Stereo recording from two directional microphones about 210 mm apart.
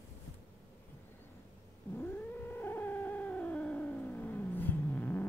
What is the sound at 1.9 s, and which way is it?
Cat, 10° left (ahead or behind).